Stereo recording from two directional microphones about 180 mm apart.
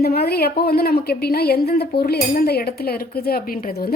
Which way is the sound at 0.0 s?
60° left (ahead or behind).